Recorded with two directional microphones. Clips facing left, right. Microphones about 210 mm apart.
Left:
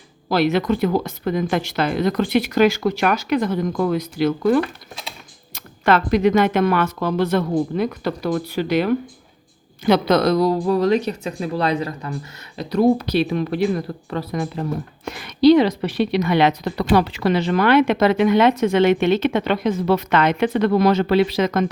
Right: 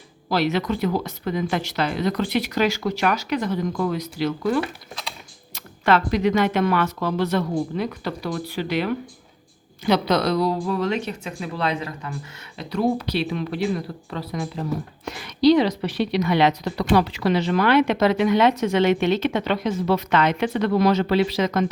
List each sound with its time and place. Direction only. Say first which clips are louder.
0.3 s speech: left 4 dB; 50° left (ahead or behind)
6.1 s speech: left 4 dB; 50° left (ahead or behind)